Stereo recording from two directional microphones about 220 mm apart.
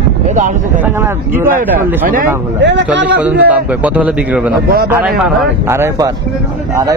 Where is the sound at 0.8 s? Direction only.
10° right (ahead or behind).